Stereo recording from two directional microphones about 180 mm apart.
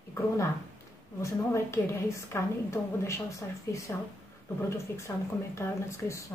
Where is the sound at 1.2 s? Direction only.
15° left (ahead or behind).